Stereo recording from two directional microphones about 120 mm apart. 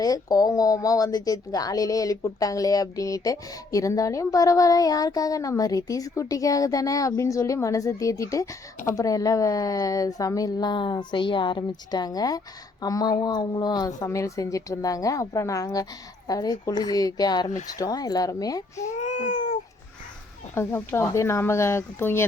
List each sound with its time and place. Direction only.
0.0 s a woman's voice: 30° left (ahead or behind)
18.9 s a sound: 90° left
20.6 s speech: 20° left (ahead or behind)